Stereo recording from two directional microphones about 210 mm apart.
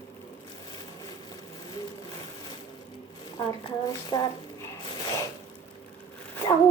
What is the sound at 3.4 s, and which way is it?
Speech, 25° left (ahead or behind).